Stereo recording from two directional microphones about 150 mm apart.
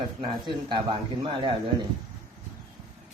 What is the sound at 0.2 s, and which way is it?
Speech, 30° right (ahead or behind).